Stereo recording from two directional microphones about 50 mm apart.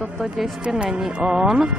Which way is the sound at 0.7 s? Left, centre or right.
Centre.